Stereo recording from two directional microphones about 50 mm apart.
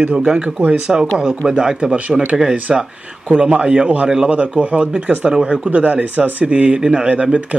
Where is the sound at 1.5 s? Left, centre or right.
Centre.